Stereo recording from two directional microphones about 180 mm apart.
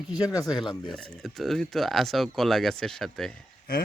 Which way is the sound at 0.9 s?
Centre (ahead or behind).